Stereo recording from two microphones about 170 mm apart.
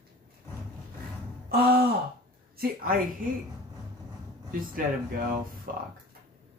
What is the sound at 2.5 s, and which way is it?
Speech, 55° right (ahead or behind).